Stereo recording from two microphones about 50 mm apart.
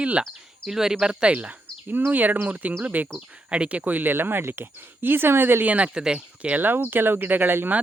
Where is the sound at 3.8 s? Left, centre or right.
Right.